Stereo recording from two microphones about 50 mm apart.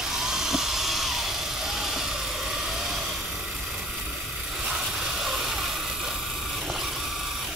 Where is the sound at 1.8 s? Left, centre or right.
Centre.